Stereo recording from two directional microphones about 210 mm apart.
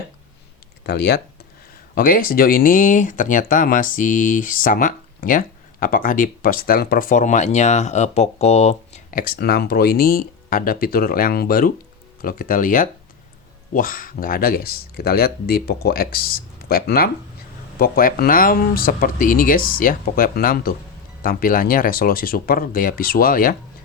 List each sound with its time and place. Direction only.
0.9 s speech: 50° left (ahead or behind)